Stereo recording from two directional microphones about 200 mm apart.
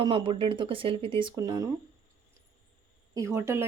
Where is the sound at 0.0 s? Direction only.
25° right (ahead or behind).